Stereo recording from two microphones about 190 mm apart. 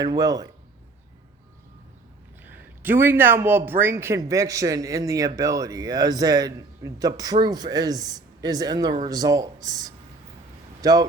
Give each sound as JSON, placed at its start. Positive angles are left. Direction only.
{"t": 0.0, "sound": "a man's voice", "side_deg": -20}
{"t": 2.4, "sound": "a man's voice", "side_deg": -10}
{"t": 10.8, "sound": "vehicle", "side_deg": -20}